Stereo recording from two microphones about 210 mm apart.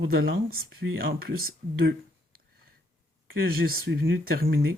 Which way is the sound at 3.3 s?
45° right (ahead or behind).